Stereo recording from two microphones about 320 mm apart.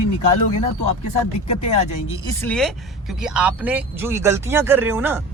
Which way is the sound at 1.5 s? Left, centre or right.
Left.